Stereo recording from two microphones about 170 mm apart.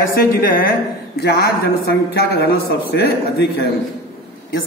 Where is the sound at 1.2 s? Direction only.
70° left (ahead or behind).